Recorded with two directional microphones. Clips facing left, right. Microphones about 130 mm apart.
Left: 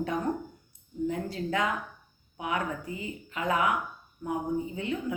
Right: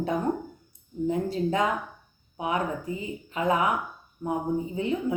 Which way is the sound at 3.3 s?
25° right (ahead or behind).